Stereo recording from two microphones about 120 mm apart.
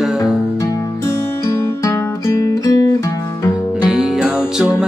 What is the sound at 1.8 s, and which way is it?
Guitar, 25° left (ahead or behind).